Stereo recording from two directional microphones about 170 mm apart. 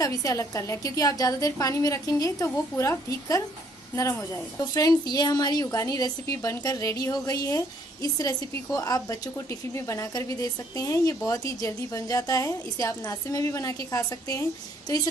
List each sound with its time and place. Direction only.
0.0 s a woman's voice: 20° left (ahead or behind)